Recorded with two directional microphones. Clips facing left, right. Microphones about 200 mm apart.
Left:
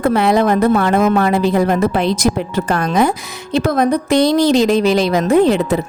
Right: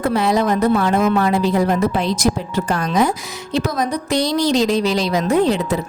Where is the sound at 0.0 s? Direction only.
60° left (ahead or behind).